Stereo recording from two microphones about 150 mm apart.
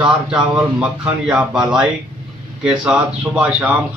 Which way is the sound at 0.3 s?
5° right (ahead or behind).